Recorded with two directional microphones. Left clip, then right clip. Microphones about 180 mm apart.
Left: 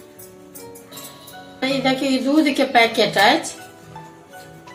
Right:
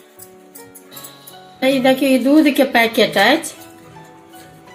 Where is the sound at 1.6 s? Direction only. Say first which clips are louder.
Right 6 dB; 50° right (ahead or behind).